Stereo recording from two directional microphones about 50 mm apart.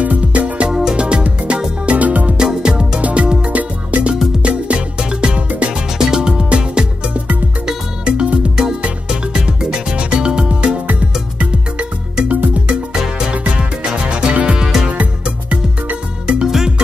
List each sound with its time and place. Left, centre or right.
0.0 s music: right
0.7 s music: centre
0.9 s music: right
2.3 s music: centre
3.0 s music: right
5.9 s music: centre
12.3 s music: right
14.6 s music: centre
14.9 s music: right
16.3 s music: centre